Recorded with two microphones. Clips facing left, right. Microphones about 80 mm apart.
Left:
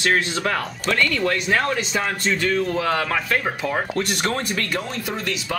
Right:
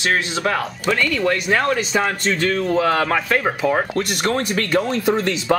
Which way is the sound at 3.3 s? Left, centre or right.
Right.